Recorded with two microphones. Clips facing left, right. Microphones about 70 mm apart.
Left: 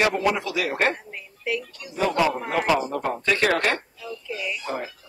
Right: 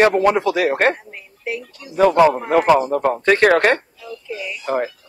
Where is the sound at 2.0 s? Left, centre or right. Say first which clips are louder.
Right 9 dB; right.